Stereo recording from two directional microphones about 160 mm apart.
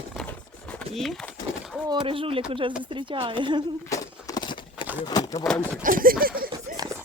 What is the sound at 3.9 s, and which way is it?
Clip-clop, 25° left (ahead or behind).